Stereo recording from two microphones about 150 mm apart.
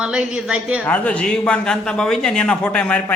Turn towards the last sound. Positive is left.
turn(degrees=10)  # may be behind; listen again after turning